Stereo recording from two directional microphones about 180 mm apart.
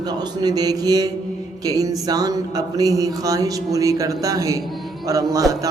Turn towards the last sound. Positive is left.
turn(degrees=-20)  # may be behind; listen again after turning